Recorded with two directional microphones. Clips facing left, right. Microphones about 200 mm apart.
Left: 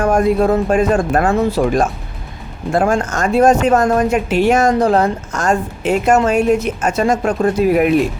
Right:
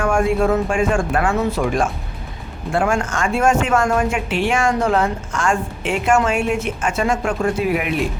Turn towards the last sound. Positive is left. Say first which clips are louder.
# left 6 dB
turn(degrees=40)  # may be behind; listen again after turning